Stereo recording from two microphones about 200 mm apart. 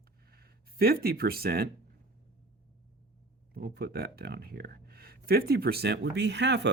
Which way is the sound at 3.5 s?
50° right (ahead or behind).